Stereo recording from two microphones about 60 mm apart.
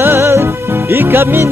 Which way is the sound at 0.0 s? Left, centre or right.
Right.